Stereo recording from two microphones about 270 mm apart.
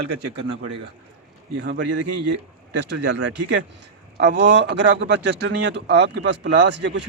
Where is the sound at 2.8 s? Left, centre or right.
Right.